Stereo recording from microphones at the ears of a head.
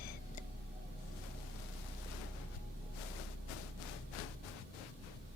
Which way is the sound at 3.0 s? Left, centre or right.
Left.